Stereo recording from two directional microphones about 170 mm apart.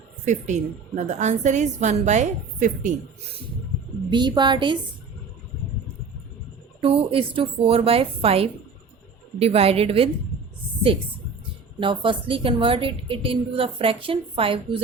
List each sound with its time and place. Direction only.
0.3 s a woman's voice: 45° right (ahead or behind)
4.1 s a woman's voice: 25° right (ahead or behind)
6.8 s a woman's voice: 35° right (ahead or behind)
11.8 s a woman's voice: 30° right (ahead or behind)